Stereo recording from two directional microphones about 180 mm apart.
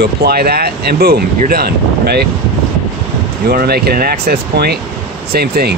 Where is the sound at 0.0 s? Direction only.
60° right (ahead or behind).